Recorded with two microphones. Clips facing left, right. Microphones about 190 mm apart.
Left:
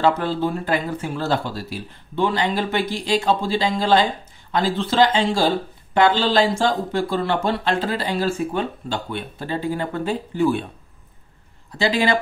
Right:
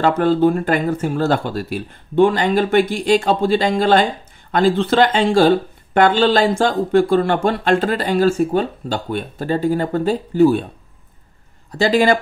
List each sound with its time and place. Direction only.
0.0 s speech: 50° right (ahead or behind)
11.7 s speech: 45° right (ahead or behind)